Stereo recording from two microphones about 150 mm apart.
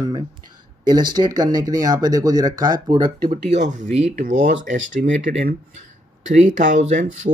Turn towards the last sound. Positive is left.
turn(degrees=-55)  # may be behind; listen again after turning